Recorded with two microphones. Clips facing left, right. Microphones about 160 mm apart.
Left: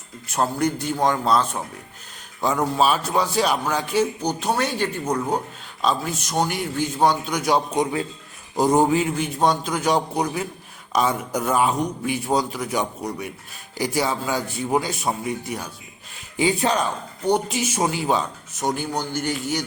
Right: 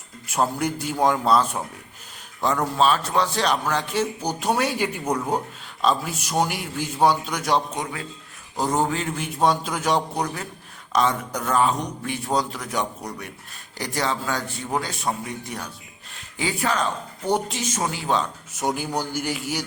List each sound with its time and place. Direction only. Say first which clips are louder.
0.6 s a man's voice: left 1 dB; 5° right (ahead or behind)
8.5 s speech: left 6 dB; 15° left (ahead or behind)
9.1 s a man's voice: left 1 dB; centre (ahead or behind)
16.4 s speech: left 4 dB; 20° left (ahead or behind)
17.2 s a man's voice: left 3 dB; centre (ahead or behind)
17.6 s speech: left 4 dB; 10° left (ahead or behind)
18.5 s a man's voice: left 1 dB; 5° right (ahead or behind)